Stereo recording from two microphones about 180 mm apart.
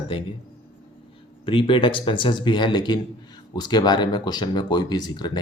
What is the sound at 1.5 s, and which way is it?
Speech, 30° left (ahead or behind).